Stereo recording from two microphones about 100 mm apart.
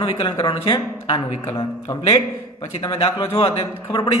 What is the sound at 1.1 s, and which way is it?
Speech, 30° left (ahead or behind).